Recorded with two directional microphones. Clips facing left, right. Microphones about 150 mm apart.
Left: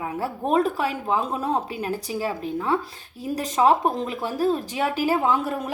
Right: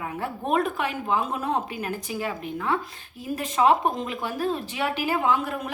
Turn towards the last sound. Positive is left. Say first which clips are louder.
# left 2 dB
turn(degrees=35)  # may be behind; listen again after turning